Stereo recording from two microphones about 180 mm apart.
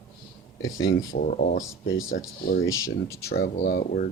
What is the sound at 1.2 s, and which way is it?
Speech, 50° left (ahead or behind).